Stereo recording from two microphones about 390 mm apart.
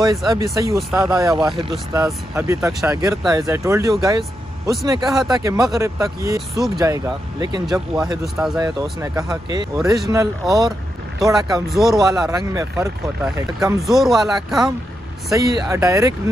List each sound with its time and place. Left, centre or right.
0.0 s speech: centre
15.7 s speech: centre